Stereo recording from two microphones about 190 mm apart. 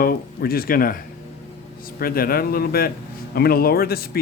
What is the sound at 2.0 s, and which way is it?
Speech, 50° left (ahead or behind).